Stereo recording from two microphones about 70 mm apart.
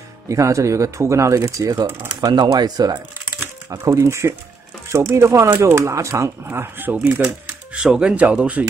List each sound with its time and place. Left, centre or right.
0.3 s speech: right
2.1 s speech: right
3.3 s a sound: right
3.8 s speech: right
7.7 s speech: centre